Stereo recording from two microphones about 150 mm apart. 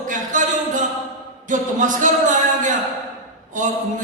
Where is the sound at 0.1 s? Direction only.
60° right (ahead or behind).